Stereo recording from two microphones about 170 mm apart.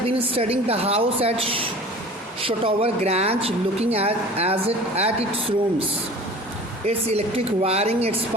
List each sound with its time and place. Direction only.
0.3 s speech: 35° right (ahead or behind)
6.8 s speech: 35° right (ahead or behind)